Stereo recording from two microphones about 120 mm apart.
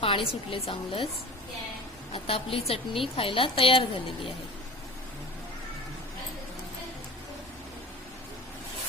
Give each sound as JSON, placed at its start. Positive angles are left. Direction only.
{"t": 0.0, "sound": "a sound", "side_deg": 50}
{"t": 0.5, "sound": "a woman's voice", "side_deg": 50}
{"t": 2.1, "sound": "a woman's voice", "side_deg": 50}